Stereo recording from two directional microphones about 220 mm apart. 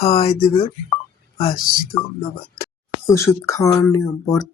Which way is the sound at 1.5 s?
40° left (ahead or behind).